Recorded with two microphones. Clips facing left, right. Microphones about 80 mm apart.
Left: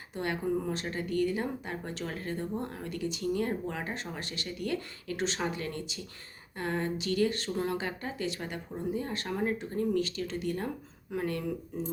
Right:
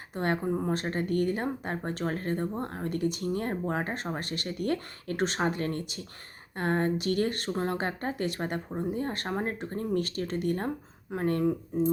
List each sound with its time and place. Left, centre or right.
0.1 s speech: right